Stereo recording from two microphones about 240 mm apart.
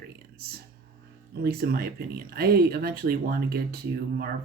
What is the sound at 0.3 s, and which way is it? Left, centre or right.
Speech, right.